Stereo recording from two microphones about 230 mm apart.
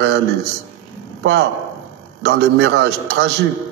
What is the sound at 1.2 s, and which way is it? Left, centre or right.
A man's voice, right.